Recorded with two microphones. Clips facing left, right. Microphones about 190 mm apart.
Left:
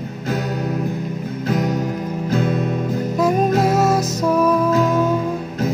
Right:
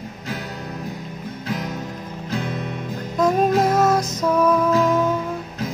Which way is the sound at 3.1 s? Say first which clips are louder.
Even; 10° left (ahead or behind).